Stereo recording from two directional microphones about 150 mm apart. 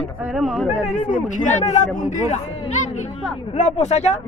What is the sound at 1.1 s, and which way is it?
Speech, 55° left (ahead or behind).